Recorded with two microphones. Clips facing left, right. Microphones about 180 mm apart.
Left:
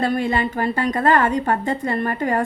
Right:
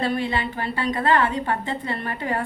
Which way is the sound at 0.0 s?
45° left (ahead or behind).